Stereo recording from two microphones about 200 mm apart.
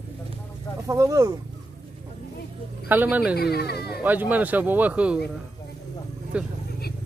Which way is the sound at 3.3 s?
55° left (ahead or behind).